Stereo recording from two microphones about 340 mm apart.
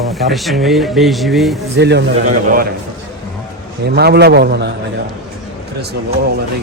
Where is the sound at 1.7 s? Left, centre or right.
Right.